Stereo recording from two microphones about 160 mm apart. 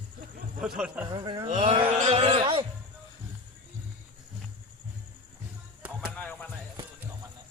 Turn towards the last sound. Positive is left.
turn(degrees=10)  # may be behind; listen again after turning